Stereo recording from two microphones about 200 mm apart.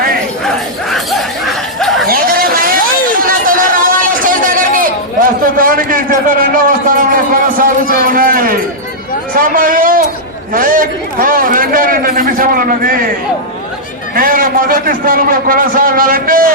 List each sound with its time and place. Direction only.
0.4 s laughter: centre (ahead or behind)
2.0 s a sound: 45° right (ahead or behind)
10.5 s a man's voice: 45° right (ahead or behind)
14.2 s a man's voice: 45° right (ahead or behind)